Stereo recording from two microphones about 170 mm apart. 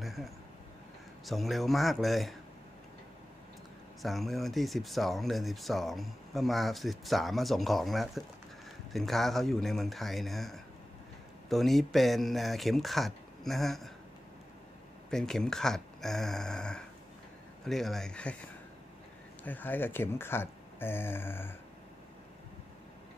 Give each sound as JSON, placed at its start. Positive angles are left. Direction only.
{"t": 0.0, "sound": "a sound", "side_deg": 0}
{"t": 1.2, "sound": "speech", "side_deg": 0}
{"t": 4.0, "sound": "speech", "side_deg": 0}
{"t": 15.0, "sound": "speech", "side_deg": 5}
{"t": 19.4, "sound": "speech", "side_deg": 10}